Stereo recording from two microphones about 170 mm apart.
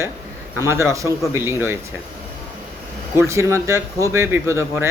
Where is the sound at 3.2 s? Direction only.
15° right (ahead or behind).